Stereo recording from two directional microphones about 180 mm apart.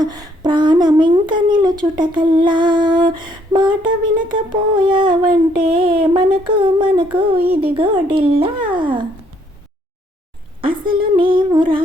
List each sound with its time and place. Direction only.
0.0 s speech: 20° right (ahead or behind)
10.6 s speech: 30° right (ahead or behind)